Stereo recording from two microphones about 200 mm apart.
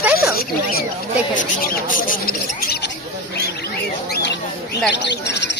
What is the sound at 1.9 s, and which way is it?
Speech, 40° left (ahead or behind).